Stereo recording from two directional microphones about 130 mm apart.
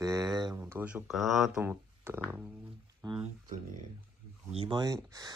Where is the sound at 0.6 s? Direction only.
15° right (ahead or behind).